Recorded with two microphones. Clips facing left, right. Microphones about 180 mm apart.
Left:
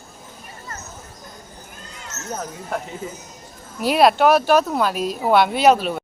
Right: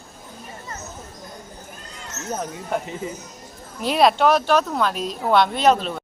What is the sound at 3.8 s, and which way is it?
Speech, 5° left (ahead or behind).